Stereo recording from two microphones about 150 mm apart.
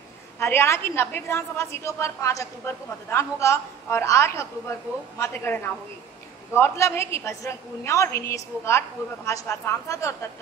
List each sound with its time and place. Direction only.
0.4 s a woman's voice: 15° left (ahead or behind)